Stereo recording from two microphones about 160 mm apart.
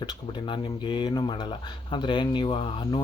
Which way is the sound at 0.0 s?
25° left (ahead or behind).